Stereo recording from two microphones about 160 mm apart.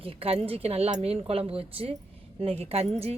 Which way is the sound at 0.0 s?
35° right (ahead or behind).